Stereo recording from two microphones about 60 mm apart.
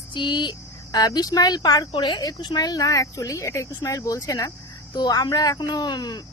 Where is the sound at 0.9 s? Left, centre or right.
Left.